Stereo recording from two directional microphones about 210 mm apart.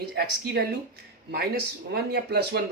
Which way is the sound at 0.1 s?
50° right (ahead or behind).